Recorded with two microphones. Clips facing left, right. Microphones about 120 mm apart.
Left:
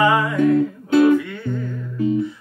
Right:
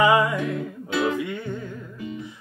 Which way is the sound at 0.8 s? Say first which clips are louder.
Left 10 dB; 45° left (ahead or behind).